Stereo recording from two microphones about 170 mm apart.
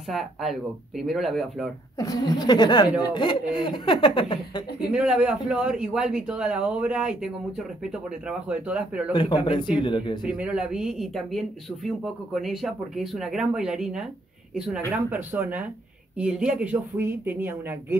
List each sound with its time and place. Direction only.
0.1 s speech: centre (ahead or behind)
2.0 s speech: 20° left (ahead or behind)
4.7 s speech: 5° right (ahead or behind)
9.1 s speech: 30° left (ahead or behind)
10.2 s speech: 5° right (ahead or behind)